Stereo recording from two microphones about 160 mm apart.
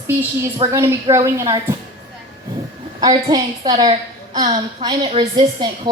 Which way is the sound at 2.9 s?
25° right (ahead or behind).